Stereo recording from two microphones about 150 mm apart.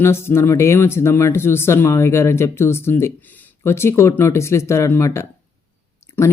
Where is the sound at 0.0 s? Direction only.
15° left (ahead or behind).